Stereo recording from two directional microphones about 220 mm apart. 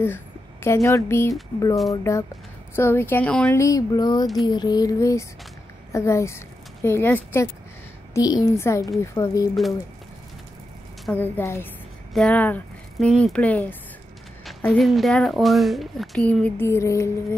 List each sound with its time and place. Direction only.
0.0 s speech: 10° left (ahead or behind)
11.1 s speech: 10° left (ahead or behind)